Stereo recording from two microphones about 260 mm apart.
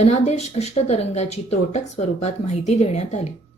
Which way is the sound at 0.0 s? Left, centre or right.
Left.